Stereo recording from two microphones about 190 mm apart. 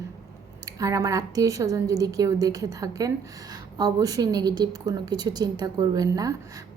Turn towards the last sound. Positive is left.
turn(degrees=-20)  # may be behind; listen again after turning